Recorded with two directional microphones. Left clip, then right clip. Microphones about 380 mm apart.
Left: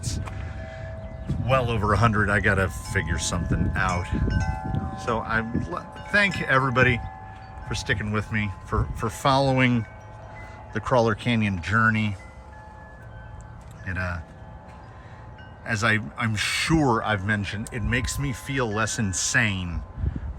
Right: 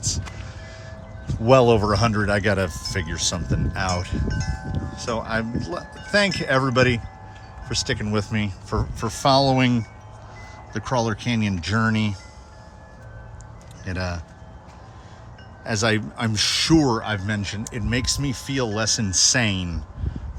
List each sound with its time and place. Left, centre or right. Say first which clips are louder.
1.5 s speech: right 7 dB; centre
4.3 s a sound: left 1 dB; left
4.7 s speech: right 1 dB; centre
13.8 s speech: right 1 dB; centre
15.6 s speech: right 1 dB; centre